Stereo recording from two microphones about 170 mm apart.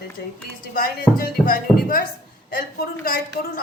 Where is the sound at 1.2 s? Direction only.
60° left (ahead or behind).